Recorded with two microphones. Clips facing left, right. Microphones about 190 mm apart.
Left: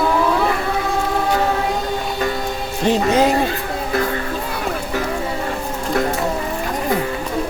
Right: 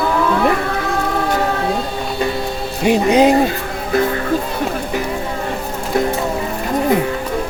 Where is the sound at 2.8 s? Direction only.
15° right (ahead or behind).